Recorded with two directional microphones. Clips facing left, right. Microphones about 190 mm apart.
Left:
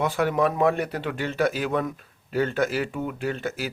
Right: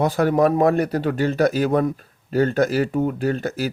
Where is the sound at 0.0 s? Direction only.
40° right (ahead or behind).